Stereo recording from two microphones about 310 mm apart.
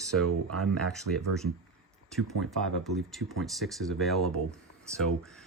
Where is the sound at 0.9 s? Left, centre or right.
Centre.